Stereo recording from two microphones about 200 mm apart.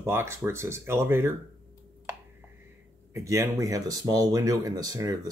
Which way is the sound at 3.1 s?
15° right (ahead or behind).